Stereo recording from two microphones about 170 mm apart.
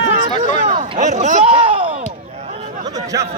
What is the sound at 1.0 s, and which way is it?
Speech, 45° right (ahead or behind).